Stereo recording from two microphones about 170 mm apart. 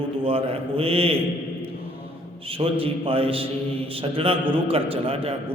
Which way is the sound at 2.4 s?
35° right (ahead or behind).